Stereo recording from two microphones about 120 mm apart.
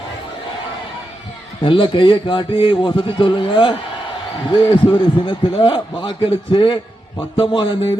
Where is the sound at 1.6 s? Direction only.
45° left (ahead or behind).